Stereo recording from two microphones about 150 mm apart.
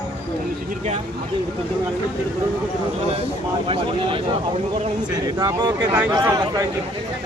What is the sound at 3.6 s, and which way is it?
Speech, 35° right (ahead or behind).